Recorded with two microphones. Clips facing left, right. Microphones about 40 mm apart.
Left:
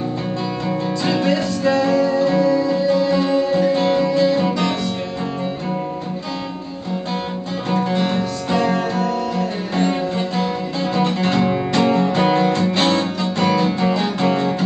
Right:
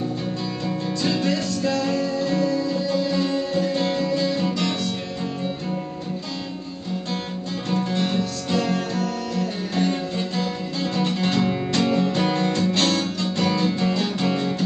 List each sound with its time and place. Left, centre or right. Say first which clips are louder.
0.7 s music: left 3 dB; centre
7.7 s music: left 4 dB; centre